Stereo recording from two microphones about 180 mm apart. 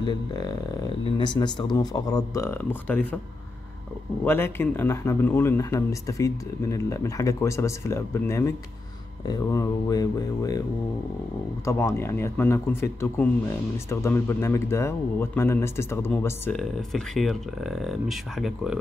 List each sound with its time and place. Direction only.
0.0 s speech: 20° left (ahead or behind)
4.2 s speech: 10° left (ahead or behind)
11.6 s speech: 15° left (ahead or behind)
16.5 s speech: centre (ahead or behind)